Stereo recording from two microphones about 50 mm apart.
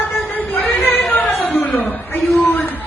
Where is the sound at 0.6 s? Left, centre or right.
Left.